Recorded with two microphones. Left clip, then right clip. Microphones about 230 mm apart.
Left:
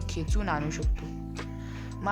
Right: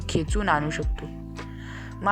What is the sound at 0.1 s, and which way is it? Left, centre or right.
Speech, centre.